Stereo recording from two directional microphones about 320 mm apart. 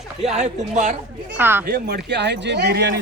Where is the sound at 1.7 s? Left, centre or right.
Right.